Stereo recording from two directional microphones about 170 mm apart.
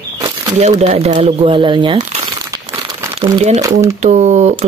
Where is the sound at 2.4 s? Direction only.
20° right (ahead or behind).